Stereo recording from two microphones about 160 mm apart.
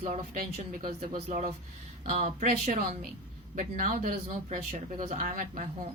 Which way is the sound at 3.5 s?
60° right (ahead or behind).